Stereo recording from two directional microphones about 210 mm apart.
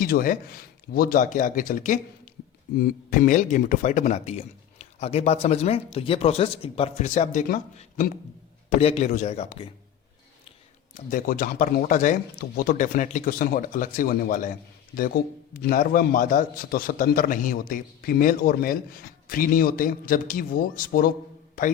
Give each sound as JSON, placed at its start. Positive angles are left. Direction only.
{"t": 0.0, "sound": "speech", "side_deg": 40}
{"t": 10.9, "sound": "a man's voice", "side_deg": 40}